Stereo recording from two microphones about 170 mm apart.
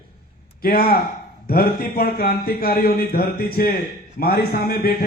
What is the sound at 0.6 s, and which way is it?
A man's voice, 60° left (ahead or behind).